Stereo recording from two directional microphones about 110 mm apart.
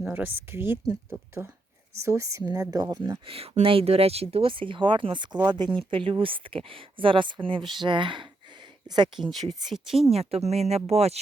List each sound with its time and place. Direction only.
0.0 s speech: 15° right (ahead or behind); by 3.2 s 35° right (ahead or behind)
3.2 s speech: 60° right (ahead or behind)
9.9 s speech: 65° right (ahead or behind)